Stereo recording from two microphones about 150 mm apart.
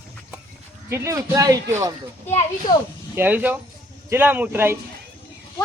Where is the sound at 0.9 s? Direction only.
20° right (ahead or behind).